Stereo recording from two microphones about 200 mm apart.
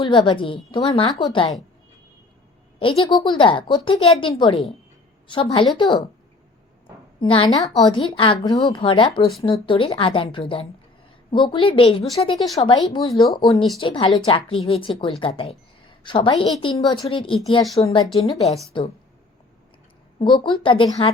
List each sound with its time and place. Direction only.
0.0 s speech: 25° left (ahead or behind)
3.1 s speech: 25° left (ahead or behind)
7.2 s speech: 25° left (ahead or behind)
20.1 s speech: 25° left (ahead or behind)